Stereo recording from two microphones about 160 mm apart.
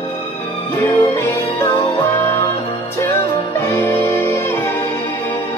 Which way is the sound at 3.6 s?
15° left (ahead or behind).